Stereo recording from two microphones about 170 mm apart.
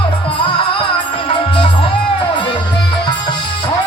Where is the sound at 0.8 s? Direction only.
30° left (ahead or behind).